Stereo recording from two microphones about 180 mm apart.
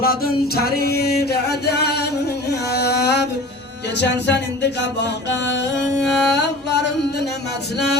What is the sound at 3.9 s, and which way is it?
Music, 75° left (ahead or behind).